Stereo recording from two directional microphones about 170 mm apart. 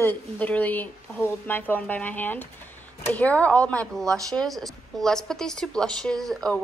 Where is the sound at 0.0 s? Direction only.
10° left (ahead or behind).